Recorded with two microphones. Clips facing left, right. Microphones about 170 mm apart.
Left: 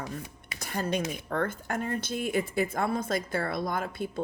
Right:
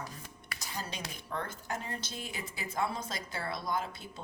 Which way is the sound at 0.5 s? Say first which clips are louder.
Left 11 dB; 55° left (ahead or behind).